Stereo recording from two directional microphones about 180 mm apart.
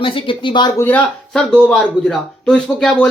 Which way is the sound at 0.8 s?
5° left (ahead or behind).